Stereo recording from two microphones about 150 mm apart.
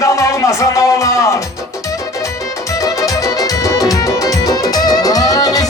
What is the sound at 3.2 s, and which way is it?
Music, 25° left (ahead or behind).